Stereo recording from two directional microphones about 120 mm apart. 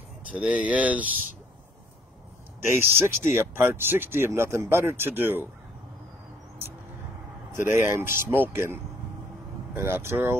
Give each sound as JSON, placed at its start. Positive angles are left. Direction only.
{"t": 0.3, "sound": "speech", "side_deg": -10}
{"t": 2.6, "sound": "speech", "side_deg": -20}
{"t": 7.5, "sound": "speech", "side_deg": -20}